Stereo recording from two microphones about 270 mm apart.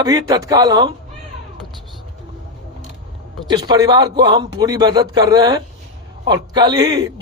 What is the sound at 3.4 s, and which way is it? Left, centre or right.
Speech, centre.